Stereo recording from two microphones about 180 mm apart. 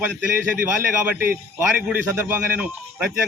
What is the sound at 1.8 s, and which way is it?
Speech, 10° right (ahead or behind).